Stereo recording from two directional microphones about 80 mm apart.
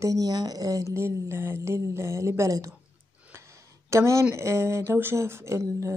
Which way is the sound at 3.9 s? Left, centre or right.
Right.